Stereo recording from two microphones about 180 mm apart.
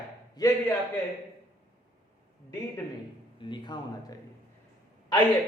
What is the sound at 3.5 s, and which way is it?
Speech, 25° left (ahead or behind).